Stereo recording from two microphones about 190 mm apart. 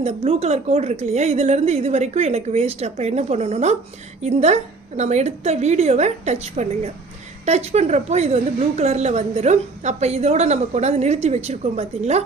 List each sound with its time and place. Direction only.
0.0 s a woman's voice: 35° right (ahead or behind)